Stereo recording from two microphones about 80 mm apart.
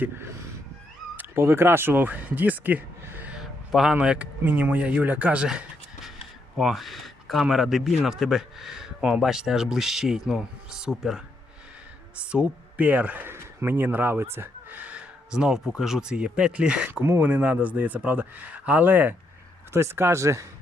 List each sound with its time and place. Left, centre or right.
0.0 s speech: right
3.3 s a sound: centre
3.9 s speech: centre
6.6 s speech: centre
12.2 s speech: centre
16.9 s speech: right
19.7 s speech: right